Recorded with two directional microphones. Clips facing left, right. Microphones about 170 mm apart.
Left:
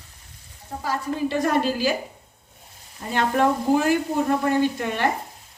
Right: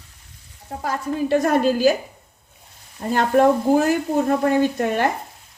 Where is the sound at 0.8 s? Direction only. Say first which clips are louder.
Right 2 dB; 50° right (ahead or behind).